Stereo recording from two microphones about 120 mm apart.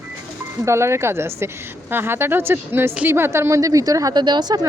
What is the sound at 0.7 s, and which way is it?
A woman's voice, 20° right (ahead or behind).